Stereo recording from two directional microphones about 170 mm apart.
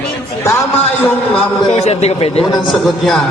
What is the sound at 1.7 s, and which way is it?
Speech, 40° left (ahead or behind).